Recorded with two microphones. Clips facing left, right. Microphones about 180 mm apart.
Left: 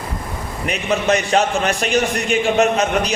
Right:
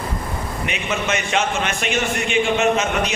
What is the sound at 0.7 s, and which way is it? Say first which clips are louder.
A man's voice: left 7 dB; 35° left (ahead or behind).